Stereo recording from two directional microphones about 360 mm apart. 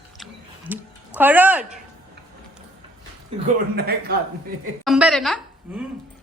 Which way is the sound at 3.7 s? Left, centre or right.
Right.